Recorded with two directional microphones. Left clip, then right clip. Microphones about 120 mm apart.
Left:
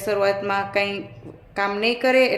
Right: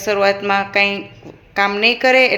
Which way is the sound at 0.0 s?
10° right (ahead or behind).